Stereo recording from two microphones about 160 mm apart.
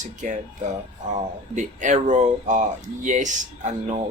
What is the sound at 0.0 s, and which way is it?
Speech, 50° right (ahead or behind).